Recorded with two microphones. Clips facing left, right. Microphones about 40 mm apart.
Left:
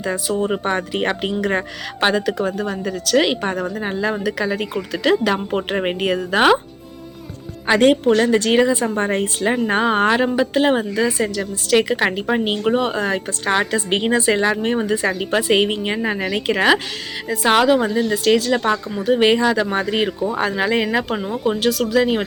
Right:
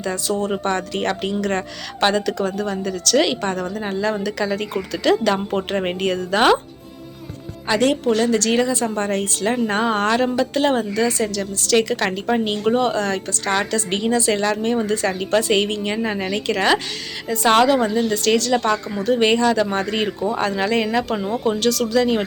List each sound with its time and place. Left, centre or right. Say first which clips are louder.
0.0 s speech: left 1 dB; centre
7.7 s a woman's voice: left 4 dB; left